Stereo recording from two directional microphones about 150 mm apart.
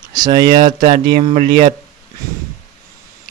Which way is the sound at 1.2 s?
50° right (ahead or behind).